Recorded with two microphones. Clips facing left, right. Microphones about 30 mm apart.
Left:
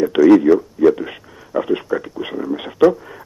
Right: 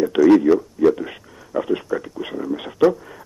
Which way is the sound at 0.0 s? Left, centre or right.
Centre.